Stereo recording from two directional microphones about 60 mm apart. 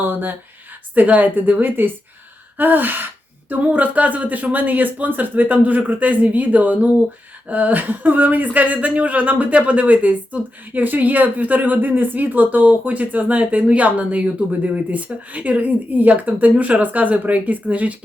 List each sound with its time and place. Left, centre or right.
0.0 s speech: right